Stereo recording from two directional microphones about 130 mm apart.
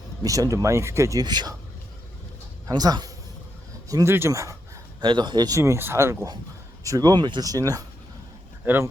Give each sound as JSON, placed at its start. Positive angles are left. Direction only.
{"t": 0.2, "sound": "speech", "side_deg": -25}
{"t": 2.6, "sound": "speech", "side_deg": -30}
{"t": 4.9, "sound": "speech", "side_deg": -35}
{"t": 8.6, "sound": "speech", "side_deg": -15}